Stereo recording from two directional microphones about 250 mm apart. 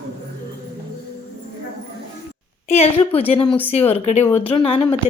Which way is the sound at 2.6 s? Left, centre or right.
Left.